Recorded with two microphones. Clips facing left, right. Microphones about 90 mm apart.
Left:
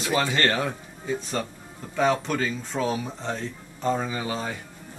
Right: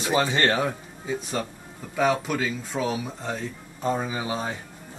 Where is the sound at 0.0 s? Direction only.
20° right (ahead or behind).